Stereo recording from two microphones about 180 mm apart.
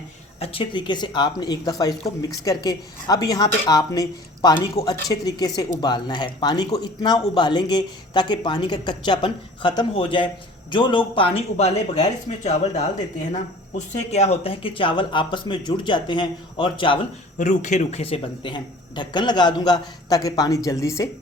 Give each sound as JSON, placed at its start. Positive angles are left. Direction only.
{"t": 0.3, "sound": "speech", "side_deg": 30}
{"t": 17.3, "sound": "speech", "side_deg": 45}